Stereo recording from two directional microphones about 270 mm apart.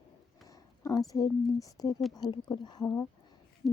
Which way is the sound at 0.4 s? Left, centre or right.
Centre.